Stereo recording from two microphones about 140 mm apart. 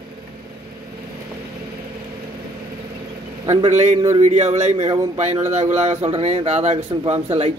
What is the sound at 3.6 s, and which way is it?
Speech, 55° right (ahead or behind).